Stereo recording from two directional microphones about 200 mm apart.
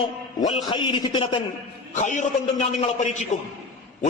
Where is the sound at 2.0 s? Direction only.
35° left (ahead or behind).